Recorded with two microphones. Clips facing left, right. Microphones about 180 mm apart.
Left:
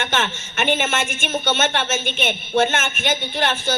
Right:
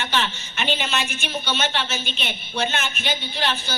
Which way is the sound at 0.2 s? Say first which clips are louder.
Left 3 dB; 50° left (ahead or behind).